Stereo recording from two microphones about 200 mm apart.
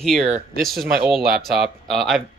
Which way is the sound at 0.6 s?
Centre (ahead or behind).